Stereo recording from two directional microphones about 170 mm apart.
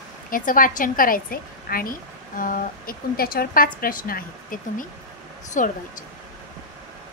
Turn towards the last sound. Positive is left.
turn(degrees=50)  # may be behind; listen again after turning